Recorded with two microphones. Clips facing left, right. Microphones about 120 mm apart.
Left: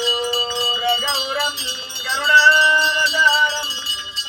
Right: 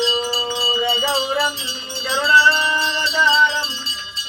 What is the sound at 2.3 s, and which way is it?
Male singing, 30° right (ahead or behind).